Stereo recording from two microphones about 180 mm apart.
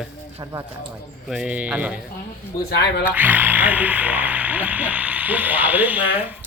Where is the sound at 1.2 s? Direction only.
5° right (ahead or behind).